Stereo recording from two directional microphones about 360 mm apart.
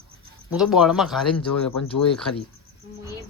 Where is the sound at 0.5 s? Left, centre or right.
Centre.